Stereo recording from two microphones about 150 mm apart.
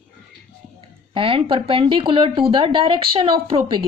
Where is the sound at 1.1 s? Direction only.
35° right (ahead or behind).